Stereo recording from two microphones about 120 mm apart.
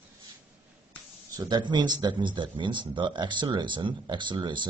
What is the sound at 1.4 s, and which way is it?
Speech, 40° right (ahead or behind).